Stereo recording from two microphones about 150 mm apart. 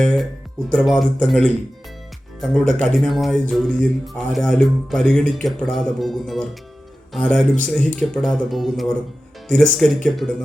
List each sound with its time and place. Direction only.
0.0 s speech: 5° left (ahead or behind)